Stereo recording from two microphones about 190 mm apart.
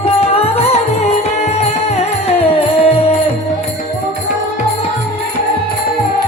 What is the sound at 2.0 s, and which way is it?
Music, 30° left (ahead or behind).